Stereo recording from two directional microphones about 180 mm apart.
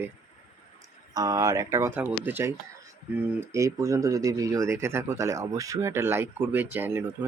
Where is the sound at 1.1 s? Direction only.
20° right (ahead or behind).